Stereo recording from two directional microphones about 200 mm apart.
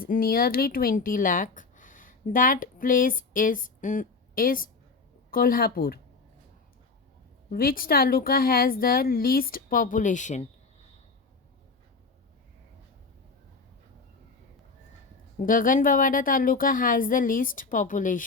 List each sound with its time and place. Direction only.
0.0 s a woman's voice: 45° left (ahead or behind)
7.5 s a woman's voice: 45° left (ahead or behind)
15.4 s a woman's voice: 45° left (ahead or behind)